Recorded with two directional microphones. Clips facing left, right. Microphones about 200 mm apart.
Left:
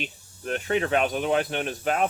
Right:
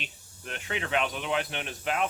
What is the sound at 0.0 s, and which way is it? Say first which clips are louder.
Speech: left 9 dB; 45° left (ahead or behind).